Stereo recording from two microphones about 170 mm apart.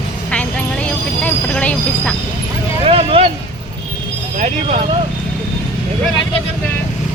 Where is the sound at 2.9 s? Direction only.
35° right (ahead or behind).